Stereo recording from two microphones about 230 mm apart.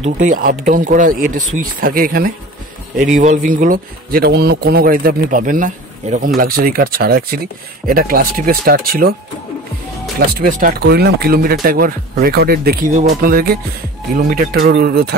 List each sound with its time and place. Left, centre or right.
0.0 s speech: right
10.3 s speech: right